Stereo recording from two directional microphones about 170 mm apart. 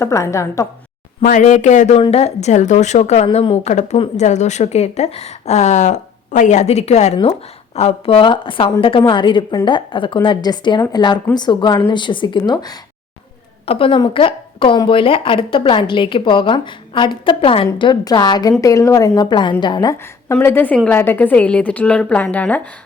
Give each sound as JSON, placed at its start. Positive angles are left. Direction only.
{"t": 0.0, "sound": "a woman's voice", "side_deg": 15}
{"t": 1.2, "sound": "a woman's voice", "side_deg": 50}